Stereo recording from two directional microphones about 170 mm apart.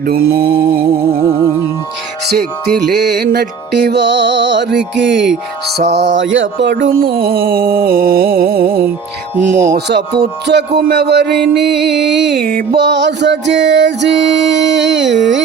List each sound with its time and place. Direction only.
0.0 s music: 60° right (ahead or behind)
2.3 s music: 70° right (ahead or behind); by 5.2 s 90° right
5.6 s music: 75° right (ahead or behind)
9.4 s speech: 50° right (ahead or behind)
9.7 s music: 75° right (ahead or behind)